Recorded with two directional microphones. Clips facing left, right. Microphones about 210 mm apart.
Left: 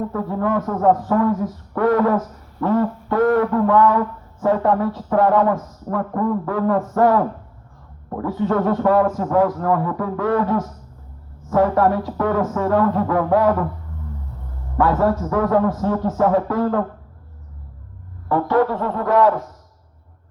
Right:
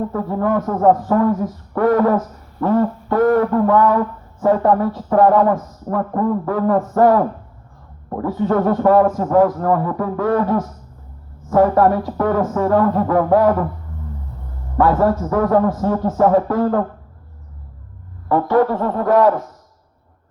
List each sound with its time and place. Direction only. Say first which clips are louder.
0.1 s a man's voice: right 2 dB; 35° right (ahead or behind)
14.8 s a man's voice: right 2 dB; 40° right (ahead or behind)
18.3 s speech: right 2 dB; 40° right (ahead or behind)